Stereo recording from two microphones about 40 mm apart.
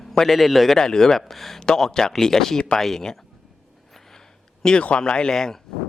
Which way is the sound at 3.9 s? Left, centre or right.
Centre.